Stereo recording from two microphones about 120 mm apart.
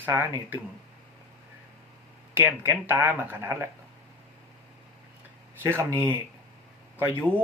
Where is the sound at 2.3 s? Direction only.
20° right (ahead or behind).